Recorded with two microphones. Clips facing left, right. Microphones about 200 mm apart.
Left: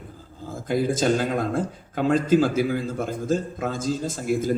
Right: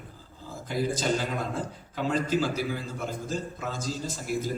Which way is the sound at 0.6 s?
50° left (ahead or behind).